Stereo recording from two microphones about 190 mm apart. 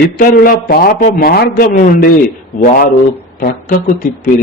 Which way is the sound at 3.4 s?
40° left (ahead or behind).